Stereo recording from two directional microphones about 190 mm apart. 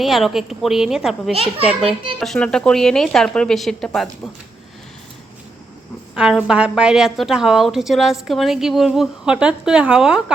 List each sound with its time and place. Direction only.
0.0 s a woman's voice: centre (ahead or behind)
1.3 s a child's voice: 30° right (ahead or behind)
2.1 s a woman's voice: centre (ahead or behind)
6.1 s a woman's voice: 5° right (ahead or behind)